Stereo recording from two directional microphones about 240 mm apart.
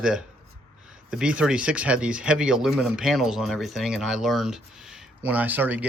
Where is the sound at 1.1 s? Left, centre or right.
Centre.